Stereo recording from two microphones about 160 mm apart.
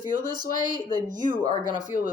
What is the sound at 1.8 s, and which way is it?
Speech, 55° left (ahead or behind).